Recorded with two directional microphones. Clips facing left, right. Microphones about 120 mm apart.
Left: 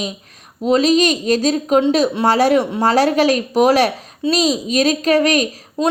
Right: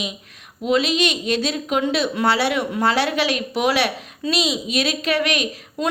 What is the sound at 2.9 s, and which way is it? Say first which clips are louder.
A woman's voice: left 7 dB; 40° left (ahead or behind).